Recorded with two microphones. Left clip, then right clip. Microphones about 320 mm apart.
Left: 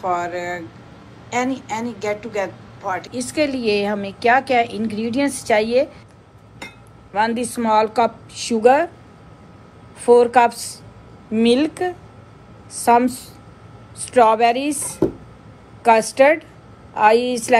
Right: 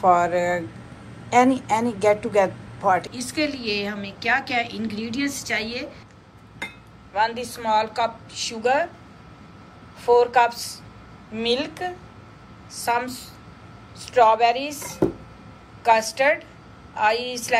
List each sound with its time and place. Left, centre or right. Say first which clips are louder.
0.0 s a woman's voice: right 4 dB; centre
7.2 s a woman's voice: left 3 dB; centre
10.0 s a woman's voice: left 4 dB; centre
15.8 s a woman's voice: left 5 dB; centre